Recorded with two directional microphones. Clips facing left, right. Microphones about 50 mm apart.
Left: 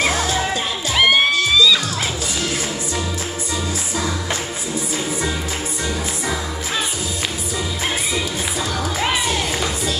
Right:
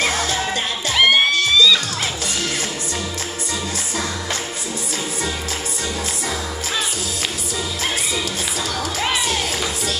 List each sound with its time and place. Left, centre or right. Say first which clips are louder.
0.0 s music: left 1 dB; left
0.9 s music: even; centre
8.7 s music: left 1 dB; centre